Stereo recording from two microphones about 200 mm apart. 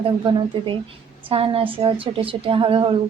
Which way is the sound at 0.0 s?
25° right (ahead or behind).